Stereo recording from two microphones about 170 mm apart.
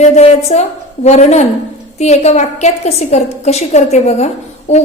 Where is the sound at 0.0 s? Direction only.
40° left (ahead or behind).